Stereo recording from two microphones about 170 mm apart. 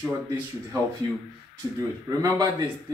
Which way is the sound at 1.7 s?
20° right (ahead or behind).